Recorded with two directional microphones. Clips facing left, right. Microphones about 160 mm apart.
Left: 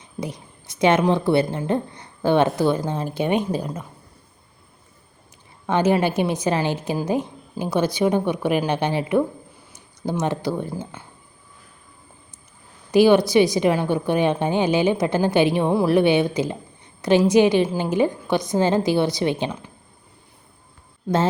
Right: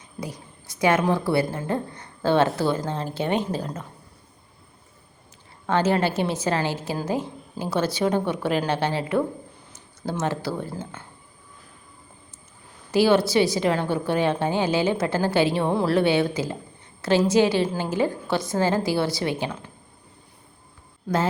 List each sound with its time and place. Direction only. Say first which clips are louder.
0.2 s a woman's voice: left 4 dB; 20° left (ahead or behind)
5.6 s a woman's voice: left 2 dB; 15° left (ahead or behind)
12.9 s a woman's voice: left 4 dB; 15° left (ahead or behind)